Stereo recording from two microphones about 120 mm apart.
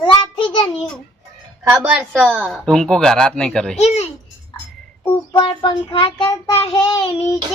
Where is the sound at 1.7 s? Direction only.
15° right (ahead or behind).